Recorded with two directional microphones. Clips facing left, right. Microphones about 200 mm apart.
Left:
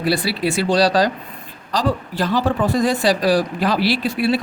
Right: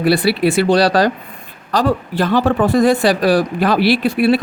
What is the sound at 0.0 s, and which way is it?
Speech, 60° right (ahead or behind).